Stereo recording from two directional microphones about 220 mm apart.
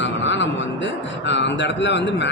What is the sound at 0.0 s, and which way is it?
A man's voice, 55° left (ahead or behind).